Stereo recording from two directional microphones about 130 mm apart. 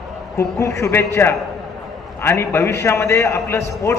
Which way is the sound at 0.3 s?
20° left (ahead or behind).